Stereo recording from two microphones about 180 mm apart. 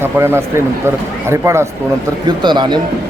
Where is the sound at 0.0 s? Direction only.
15° right (ahead or behind).